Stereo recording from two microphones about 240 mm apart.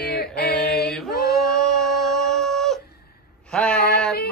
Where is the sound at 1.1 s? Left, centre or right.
Left.